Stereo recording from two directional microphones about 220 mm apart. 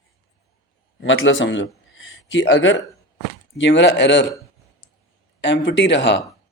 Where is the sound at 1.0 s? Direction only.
60° left (ahead or behind).